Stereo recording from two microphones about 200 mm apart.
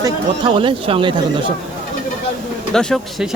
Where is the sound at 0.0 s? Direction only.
25° right (ahead or behind).